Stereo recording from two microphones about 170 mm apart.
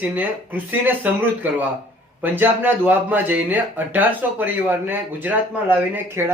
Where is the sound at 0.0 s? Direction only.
10° right (ahead or behind).